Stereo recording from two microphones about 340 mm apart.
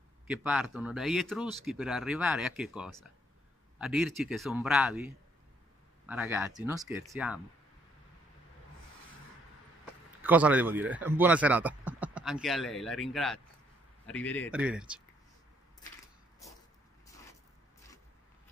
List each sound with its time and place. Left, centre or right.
0.3 s speech: centre
10.2 s speech: centre